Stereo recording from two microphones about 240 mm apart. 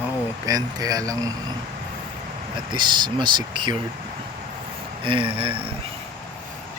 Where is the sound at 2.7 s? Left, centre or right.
Centre.